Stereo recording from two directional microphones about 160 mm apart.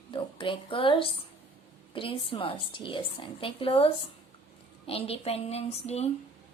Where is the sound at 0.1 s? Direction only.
30° left (ahead or behind).